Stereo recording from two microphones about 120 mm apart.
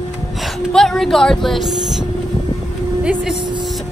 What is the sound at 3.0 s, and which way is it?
Speech, 5° right (ahead or behind).